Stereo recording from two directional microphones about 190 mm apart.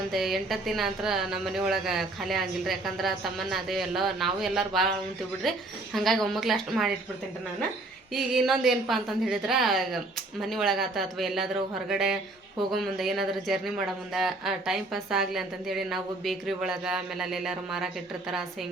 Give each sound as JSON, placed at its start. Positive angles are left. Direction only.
{"t": 0.1, "sound": "speech", "side_deg": 0}
{"t": 8.1, "sound": "speech", "side_deg": 0}